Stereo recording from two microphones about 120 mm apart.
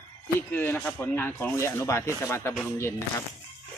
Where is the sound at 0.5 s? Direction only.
15° left (ahead or behind).